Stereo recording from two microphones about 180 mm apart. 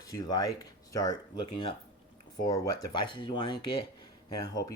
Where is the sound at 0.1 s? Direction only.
20° left (ahead or behind).